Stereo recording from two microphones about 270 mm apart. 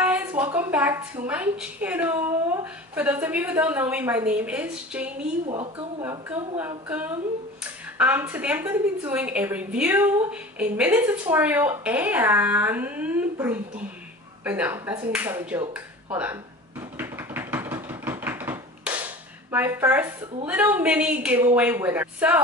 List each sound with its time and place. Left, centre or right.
0.0 s a woman's voice: centre
5.5 s a woman's voice: right
6.0 s a woman's voice: centre
16.9 s a sound: centre